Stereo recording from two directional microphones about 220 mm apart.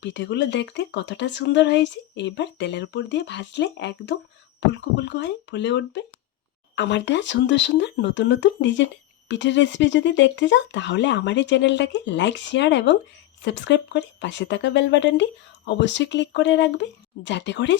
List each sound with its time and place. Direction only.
0.0 s speech: 55° left (ahead or behind)